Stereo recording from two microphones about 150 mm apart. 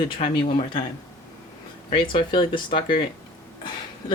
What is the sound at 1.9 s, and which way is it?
Speech, 35° left (ahead or behind).